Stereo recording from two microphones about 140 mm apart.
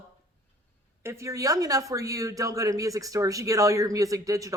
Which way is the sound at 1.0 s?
20° right (ahead or behind).